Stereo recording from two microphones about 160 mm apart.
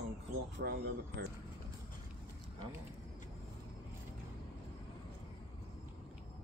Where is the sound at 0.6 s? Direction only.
90° right.